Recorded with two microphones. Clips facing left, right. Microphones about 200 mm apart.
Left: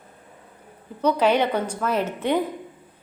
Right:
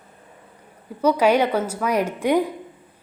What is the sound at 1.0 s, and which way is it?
A woman's voice, 10° right (ahead or behind).